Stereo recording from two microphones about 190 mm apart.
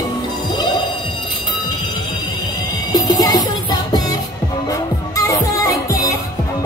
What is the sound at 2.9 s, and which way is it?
Music, 20° left (ahead or behind).